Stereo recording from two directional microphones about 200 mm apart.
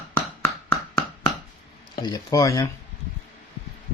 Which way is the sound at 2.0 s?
20° left (ahead or behind).